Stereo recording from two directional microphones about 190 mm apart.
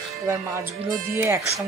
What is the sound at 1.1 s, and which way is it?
Speech, 15° right (ahead or behind).